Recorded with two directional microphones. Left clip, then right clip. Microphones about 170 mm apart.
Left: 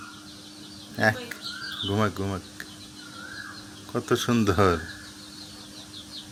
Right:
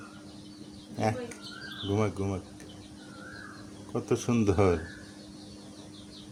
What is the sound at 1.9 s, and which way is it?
Speech, 20° left (ahead or behind).